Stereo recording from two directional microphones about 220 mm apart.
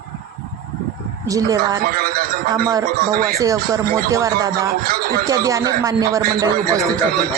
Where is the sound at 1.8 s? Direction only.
40° right (ahead or behind).